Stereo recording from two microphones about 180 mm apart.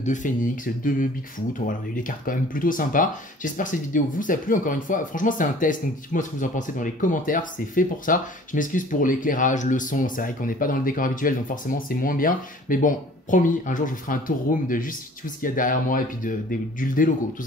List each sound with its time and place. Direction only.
0.0 s speech: 45° left (ahead or behind)